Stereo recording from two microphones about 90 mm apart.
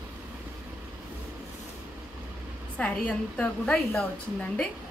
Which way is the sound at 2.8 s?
15° left (ahead or behind).